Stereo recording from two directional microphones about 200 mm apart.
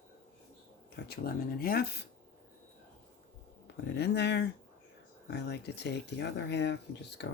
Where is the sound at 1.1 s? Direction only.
50° left (ahead or behind).